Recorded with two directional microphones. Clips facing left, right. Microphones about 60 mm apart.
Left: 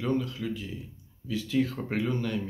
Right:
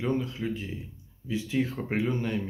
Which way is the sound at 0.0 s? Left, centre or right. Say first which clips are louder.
Even; right.